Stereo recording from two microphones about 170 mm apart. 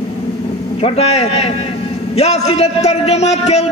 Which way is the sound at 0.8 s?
35° left (ahead or behind).